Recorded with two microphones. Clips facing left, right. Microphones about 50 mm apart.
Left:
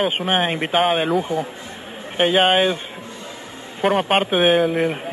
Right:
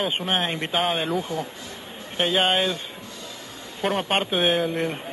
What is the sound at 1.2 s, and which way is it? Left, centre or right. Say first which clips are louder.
Speech: left 6 dB; left.